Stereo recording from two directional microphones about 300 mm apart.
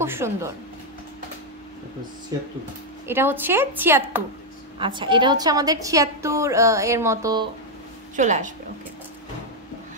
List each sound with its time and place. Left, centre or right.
0.0 s a woman's voice: centre
3.1 s a woman's voice: centre
8.2 s a woman's voice: right